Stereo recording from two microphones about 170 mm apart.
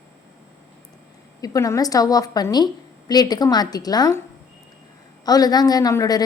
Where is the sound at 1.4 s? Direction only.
20° left (ahead or behind).